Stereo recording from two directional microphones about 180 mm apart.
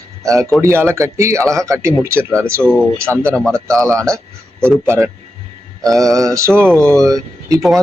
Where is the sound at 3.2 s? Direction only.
5° left (ahead or behind).